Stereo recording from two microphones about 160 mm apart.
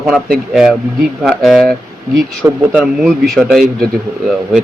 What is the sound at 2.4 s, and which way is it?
Speech, 15° right (ahead or behind).